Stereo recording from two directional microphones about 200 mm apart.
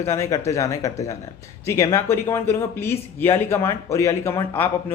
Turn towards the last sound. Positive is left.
turn(degrees=10)  # may be behind; listen again after turning